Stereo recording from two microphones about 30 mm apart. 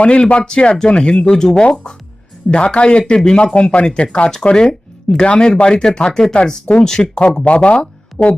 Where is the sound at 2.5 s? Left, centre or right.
Left.